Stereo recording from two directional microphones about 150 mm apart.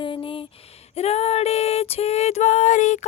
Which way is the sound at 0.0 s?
35° left (ahead or behind).